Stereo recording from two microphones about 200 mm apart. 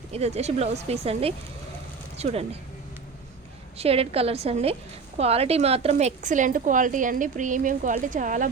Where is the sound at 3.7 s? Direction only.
30° right (ahead or behind).